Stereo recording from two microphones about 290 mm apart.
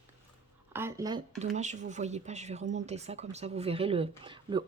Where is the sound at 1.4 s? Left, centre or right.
Right.